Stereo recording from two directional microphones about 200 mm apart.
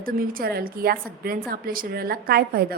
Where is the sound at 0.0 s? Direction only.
45° right (ahead or behind).